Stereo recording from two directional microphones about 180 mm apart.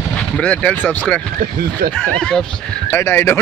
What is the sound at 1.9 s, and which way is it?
Speech, 5° left (ahead or behind).